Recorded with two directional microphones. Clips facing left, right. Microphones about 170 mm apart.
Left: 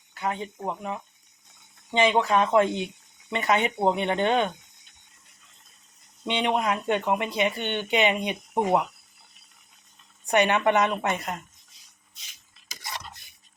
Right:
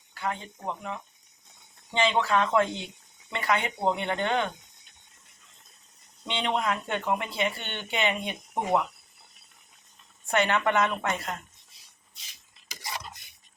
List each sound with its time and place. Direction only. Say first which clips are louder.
0.1 s speech: left 3 dB; 20° left (ahead or behind)
6.2 s speech: left 3 dB; 15° left (ahead or behind)
10.2 s speech: left 4 dB; 20° left (ahead or behind)